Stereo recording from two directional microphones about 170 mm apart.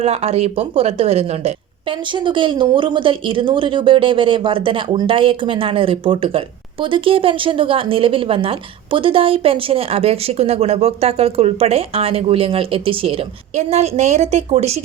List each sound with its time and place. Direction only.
0.0 s speech: 40° right (ahead or behind)